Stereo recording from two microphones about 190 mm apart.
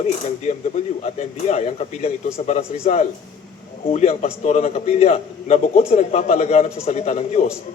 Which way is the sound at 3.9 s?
35° left (ahead or behind).